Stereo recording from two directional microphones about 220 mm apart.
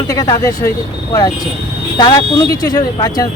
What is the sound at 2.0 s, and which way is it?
Speech, 20° left (ahead or behind).